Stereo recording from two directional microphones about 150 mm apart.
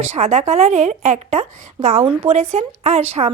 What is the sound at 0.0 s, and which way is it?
A woman's voice, 45° right (ahead or behind).